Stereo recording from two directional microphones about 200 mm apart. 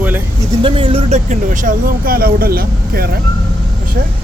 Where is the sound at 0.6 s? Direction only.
25° right (ahead or behind); by 3.1 s 50° right (ahead or behind).